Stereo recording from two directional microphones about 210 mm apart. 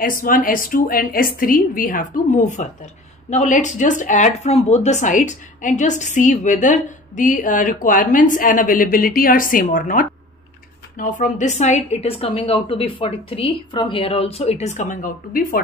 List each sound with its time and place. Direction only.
0.0 s a woman's voice: 40° left (ahead or behind)